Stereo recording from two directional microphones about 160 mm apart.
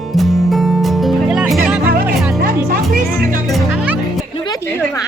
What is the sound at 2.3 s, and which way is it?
Music, 65° right (ahead or behind).